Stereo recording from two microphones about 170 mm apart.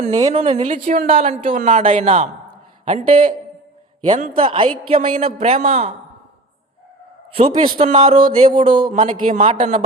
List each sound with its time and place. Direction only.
0.3 s a man's voice: 40° right (ahead or behind)
1.1 s a man's voice: 35° right (ahead or behind)
4.0 s a man's voice: 35° right (ahead or behind)
4.9 s a man's voice: 45° right (ahead or behind)
7.3 s a man's voice: 35° right (ahead or behind)
8.4 s speech: 30° right (ahead or behind)
8.9 s speech: 50° right (ahead or behind)